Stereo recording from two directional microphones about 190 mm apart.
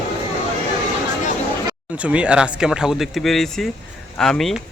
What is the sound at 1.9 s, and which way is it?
Speech, 5° right (ahead or behind).